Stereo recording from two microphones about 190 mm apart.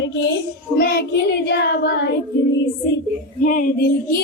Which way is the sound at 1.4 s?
55° left (ahead or behind).